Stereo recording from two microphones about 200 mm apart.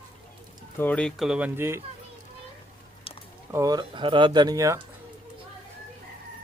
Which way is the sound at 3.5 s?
15° right (ahead or behind).